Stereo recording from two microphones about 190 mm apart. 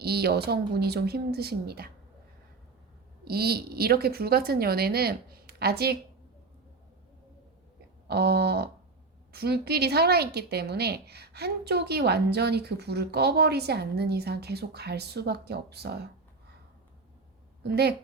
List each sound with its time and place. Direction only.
0.0 s a woman's voice: 55° right (ahead or behind)
3.2 s a woman's voice: 55° right (ahead or behind)
8.0 s a woman's voice: 55° right (ahead or behind)
17.6 s a woman's voice: 60° right (ahead or behind)